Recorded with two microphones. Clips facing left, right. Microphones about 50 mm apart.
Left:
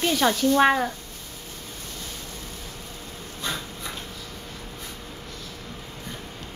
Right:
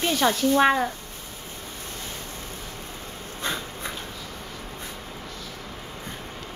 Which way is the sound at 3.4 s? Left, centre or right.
Right.